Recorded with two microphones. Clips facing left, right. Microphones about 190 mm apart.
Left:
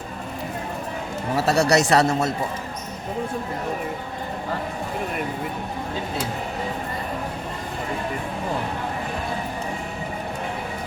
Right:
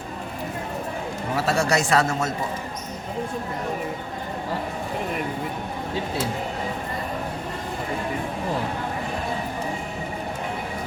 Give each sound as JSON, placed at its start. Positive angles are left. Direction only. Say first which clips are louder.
{"t": 1.5, "sound": "speech", "louder": "left 4 dB", "side_deg": 40}